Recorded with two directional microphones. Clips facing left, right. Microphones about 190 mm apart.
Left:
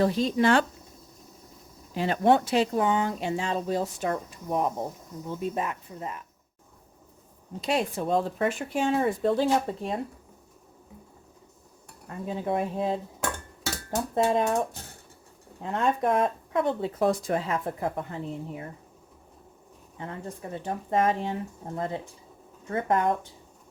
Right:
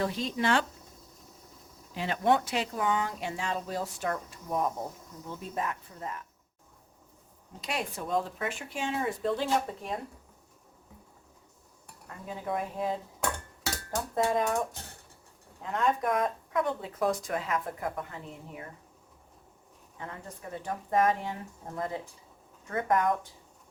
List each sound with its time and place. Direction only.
0.0 s speech: 35° left (ahead or behind)
1.9 s speech: 35° left (ahead or behind); by 6.2 s 20° left (ahead or behind)
7.6 s speech: 30° left (ahead or behind); by 9.1 s 45° left (ahead or behind)
9.2 s speech: 35° left (ahead or behind)
12.0 s speech: 25° left (ahead or behind)
20.0 s speech: 25° left (ahead or behind)